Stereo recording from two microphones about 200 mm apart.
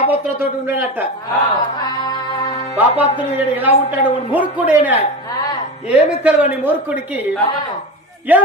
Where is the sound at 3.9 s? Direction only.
10° right (ahead or behind).